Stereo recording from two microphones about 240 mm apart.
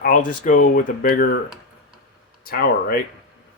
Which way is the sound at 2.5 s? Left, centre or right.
Left.